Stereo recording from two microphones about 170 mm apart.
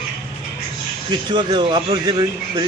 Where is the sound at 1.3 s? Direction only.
25° right (ahead or behind).